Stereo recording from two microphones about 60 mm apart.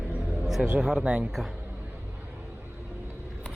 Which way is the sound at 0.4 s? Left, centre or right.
Centre.